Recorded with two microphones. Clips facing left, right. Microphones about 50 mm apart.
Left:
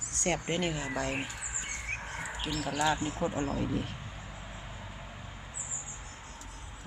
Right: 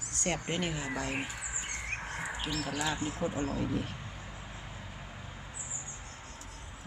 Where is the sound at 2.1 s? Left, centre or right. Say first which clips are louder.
Right 1 dB; centre.